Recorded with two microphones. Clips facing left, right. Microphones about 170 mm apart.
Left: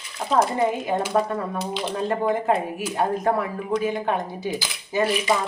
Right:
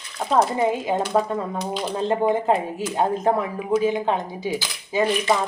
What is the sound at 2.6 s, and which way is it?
Speech, 10° left (ahead or behind).